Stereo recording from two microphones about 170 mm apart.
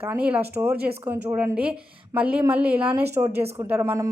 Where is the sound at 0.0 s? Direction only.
10° right (ahead or behind).